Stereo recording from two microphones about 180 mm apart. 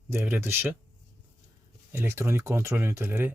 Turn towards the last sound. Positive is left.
turn(degrees=-10)  # may be behind; listen again after turning